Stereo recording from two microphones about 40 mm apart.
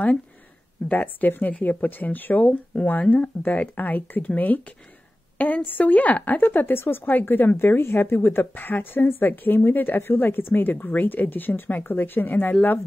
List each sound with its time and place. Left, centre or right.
0.8 s speech: left
2.7 s speech: left
3.1 s speech: left
7.1 s speech: left